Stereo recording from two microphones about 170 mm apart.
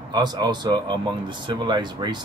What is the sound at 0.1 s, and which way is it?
Speech, 25° right (ahead or behind).